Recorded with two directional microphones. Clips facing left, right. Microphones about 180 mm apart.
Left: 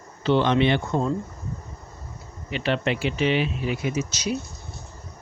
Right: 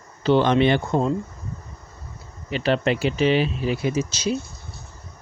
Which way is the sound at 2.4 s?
35° right (ahead or behind).